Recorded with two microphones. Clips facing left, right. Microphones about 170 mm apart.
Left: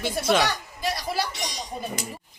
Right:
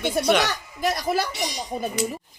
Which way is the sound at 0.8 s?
50° right (ahead or behind).